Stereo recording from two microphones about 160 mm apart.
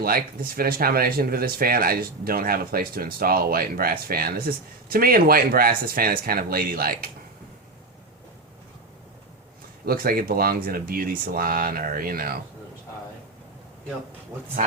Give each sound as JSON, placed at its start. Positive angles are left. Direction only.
{"t": 0.0, "sound": "speech", "side_deg": -70}
{"t": 9.8, "sound": "speech", "side_deg": -70}